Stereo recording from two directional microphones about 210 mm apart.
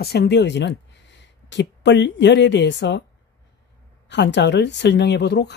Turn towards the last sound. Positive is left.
turn(degrees=55)  # may be behind; listen again after turning